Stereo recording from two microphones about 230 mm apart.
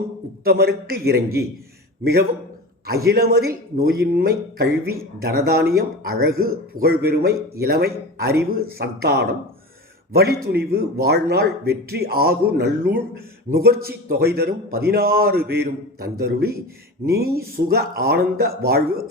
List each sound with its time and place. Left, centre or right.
0.4 s speech: right
2.8 s a man's voice: right